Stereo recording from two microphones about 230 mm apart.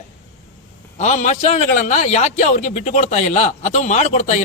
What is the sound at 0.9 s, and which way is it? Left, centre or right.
A man's voice, left.